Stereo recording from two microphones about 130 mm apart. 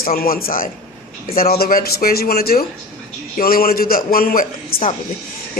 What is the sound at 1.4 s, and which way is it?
Speech, 90° left.